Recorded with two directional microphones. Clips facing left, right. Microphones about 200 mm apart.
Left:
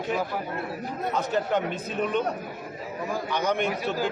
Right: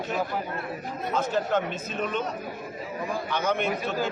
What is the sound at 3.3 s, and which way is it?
Speech, 15° left (ahead or behind).